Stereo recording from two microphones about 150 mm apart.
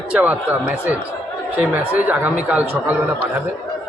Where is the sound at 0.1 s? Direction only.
10° right (ahead or behind).